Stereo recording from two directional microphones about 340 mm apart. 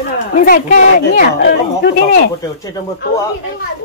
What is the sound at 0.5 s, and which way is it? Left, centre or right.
Speech, left.